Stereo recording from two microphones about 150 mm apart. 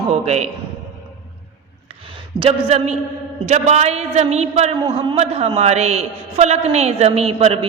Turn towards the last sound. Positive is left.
turn(degrees=-40)  # may be behind; listen again after turning